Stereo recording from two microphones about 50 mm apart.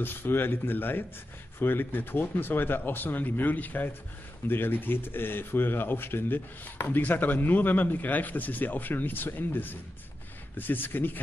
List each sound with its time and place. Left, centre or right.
0.0 s speech: left